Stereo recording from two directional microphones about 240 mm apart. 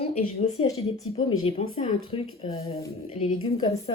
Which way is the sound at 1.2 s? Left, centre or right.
Left.